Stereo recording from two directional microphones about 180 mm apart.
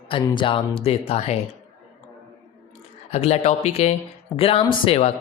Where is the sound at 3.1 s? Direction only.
35° left (ahead or behind).